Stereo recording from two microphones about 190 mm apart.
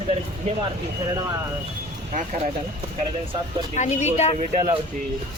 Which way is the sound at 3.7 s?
35° left (ahead or behind).